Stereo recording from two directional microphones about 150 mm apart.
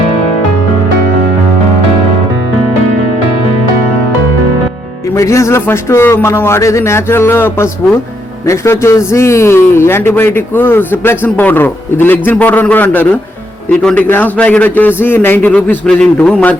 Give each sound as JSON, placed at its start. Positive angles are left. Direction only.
{"t": 5.1, "sound": "a man's voice", "side_deg": 20}